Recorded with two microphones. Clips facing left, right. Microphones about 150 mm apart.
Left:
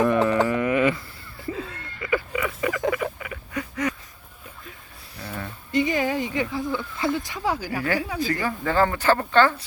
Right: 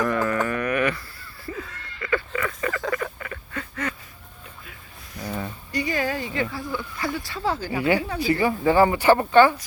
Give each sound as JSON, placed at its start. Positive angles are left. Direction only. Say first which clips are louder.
{"t": 0.0, "sound": "music", "louder": "left 4 dB", "side_deg": 25}
{"t": 2.0, "sound": "a sound", "louder": "left 1 dB", "side_deg": 15}
{"t": 5.7, "sound": "a sound", "louder": "left 3 dB", "side_deg": 20}
{"t": 6.7, "sound": "speech", "louder": "left 1 dB", "side_deg": 20}
{"t": 7.7, "sound": "speech", "louder": "right 4 dB", "side_deg": -15}
{"t": 7.9, "sound": "speech", "louder": "right 1 dB", "side_deg": 10}
{"t": 8.2, "sound": "speech", "louder": "right 5 dB", "side_deg": -15}